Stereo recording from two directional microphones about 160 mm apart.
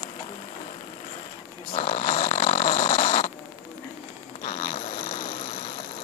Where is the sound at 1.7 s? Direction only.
45° left (ahead or behind).